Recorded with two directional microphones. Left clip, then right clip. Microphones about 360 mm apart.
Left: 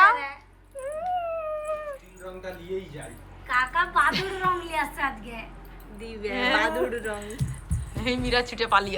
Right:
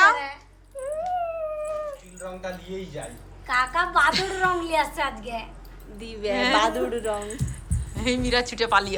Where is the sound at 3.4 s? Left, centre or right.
Right.